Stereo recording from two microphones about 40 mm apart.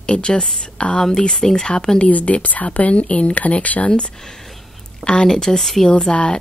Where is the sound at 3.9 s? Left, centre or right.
Centre.